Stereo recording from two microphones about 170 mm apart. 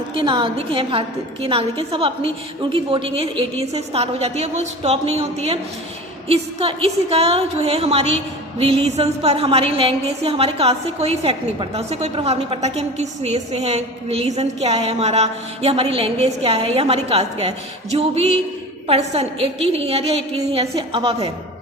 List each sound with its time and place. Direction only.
0.1 s a woman's voice: 30° right (ahead or behind)